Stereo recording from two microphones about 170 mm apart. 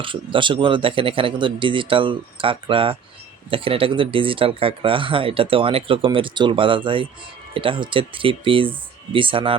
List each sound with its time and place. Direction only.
0.0 s speech: 30° right (ahead or behind)